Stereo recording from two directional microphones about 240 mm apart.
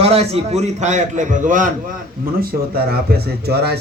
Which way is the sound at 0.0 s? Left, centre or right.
Right.